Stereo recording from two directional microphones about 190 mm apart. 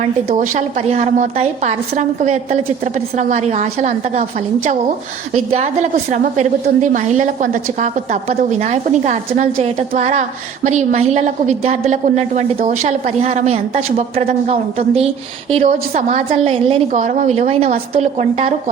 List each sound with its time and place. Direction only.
0.3 s a woman's voice: 40° right (ahead or behind)